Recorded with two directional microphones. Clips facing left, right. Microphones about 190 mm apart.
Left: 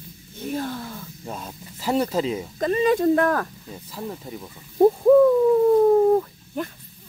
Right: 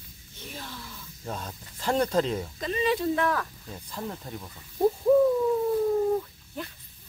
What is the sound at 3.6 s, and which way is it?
Speech, 5° left (ahead or behind).